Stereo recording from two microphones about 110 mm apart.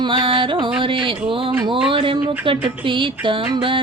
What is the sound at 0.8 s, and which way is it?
Speech, 50° right (ahead or behind).